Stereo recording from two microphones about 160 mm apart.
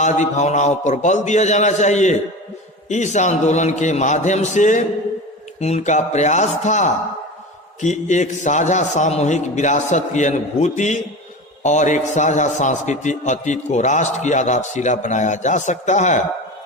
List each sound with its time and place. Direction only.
0.0 s a man's voice: 45° left (ahead or behind)